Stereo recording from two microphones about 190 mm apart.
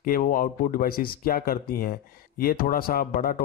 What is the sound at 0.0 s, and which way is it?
Speech, 50° left (ahead or behind).